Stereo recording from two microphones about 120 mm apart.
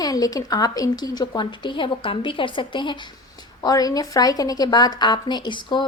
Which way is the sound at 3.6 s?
30° left (ahead or behind).